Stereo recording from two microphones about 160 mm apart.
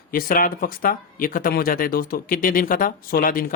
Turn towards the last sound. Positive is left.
turn(degrees=60)  # may be behind; listen again after turning